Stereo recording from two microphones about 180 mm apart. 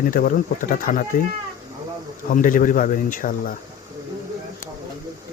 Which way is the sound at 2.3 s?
45° left (ahead or behind).